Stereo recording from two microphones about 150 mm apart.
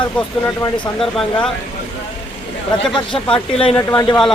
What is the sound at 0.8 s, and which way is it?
Speech, 5° left (ahead or behind).